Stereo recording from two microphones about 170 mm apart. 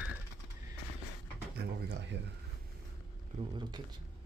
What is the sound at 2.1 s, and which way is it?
Speech, 90° right.